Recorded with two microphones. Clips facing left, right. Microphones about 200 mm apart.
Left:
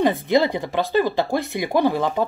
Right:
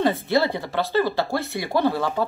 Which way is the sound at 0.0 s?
15° left (ahead or behind).